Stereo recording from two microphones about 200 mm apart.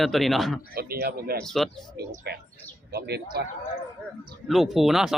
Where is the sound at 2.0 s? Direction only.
55° right (ahead or behind).